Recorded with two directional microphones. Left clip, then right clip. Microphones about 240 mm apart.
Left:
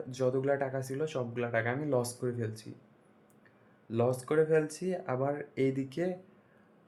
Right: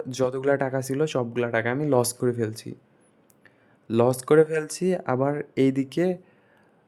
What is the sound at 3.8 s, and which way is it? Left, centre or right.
Speech, right.